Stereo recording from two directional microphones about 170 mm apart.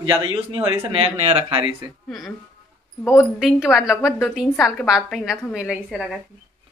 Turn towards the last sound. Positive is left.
turn(degrees=-5)  # may be behind; listen again after turning